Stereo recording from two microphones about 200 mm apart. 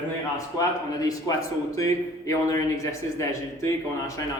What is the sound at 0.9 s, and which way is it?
A man's voice, 15° left (ahead or behind).